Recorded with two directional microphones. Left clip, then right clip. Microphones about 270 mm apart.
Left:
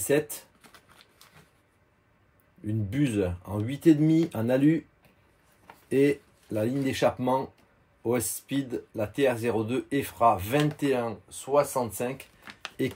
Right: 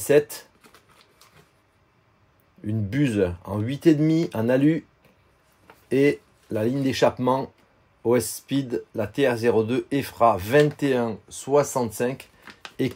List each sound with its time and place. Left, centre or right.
0.6 s a sound: centre
2.6 s speech: right
5.9 s speech: right